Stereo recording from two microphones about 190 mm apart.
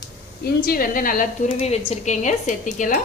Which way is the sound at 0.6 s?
50° left (ahead or behind).